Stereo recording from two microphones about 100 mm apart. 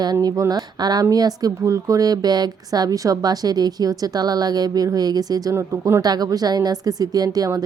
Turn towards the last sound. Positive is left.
turn(degrees=-40)  # may be behind; listen again after turning